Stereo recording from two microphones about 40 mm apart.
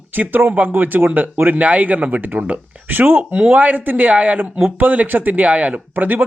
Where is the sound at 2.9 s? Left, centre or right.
Right.